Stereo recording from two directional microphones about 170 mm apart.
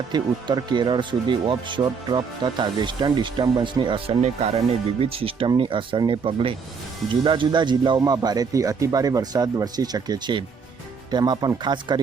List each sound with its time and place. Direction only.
0.1 s speech: 25° right (ahead or behind)